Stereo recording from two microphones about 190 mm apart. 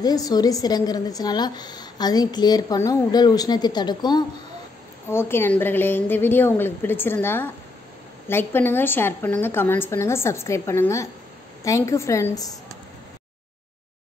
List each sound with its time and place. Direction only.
0.0 s a woman's voice: 20° left (ahead or behind)
5.0 s a woman's voice: 10° left (ahead or behind)